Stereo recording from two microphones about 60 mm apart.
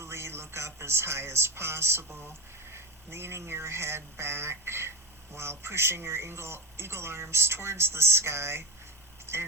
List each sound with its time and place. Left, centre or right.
0.0 s speech: right